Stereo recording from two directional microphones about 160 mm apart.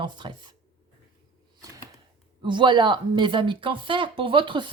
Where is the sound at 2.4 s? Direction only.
30° right (ahead or behind).